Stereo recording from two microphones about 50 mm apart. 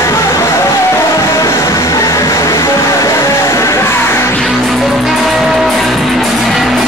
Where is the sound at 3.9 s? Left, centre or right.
Left.